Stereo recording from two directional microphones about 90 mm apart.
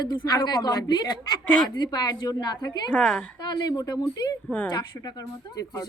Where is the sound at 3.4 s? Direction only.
50° left (ahead or behind).